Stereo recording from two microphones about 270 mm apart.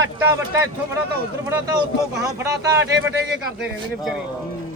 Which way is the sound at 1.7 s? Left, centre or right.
Centre.